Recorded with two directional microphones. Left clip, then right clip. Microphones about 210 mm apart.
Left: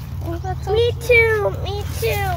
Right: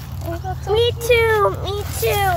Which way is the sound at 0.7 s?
50° right (ahead or behind).